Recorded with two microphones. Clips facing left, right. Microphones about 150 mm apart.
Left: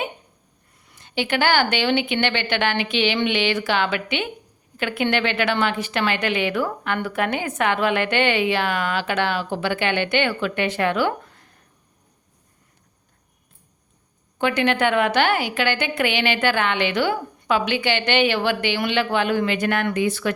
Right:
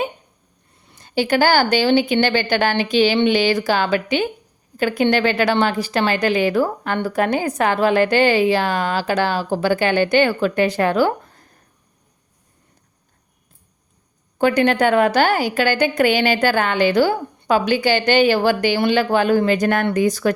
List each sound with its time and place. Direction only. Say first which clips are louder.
0.9 s a woman's voice: right 6 dB; 40° right (ahead or behind)
14.3 s a woman's voice: right 5 dB; 40° right (ahead or behind)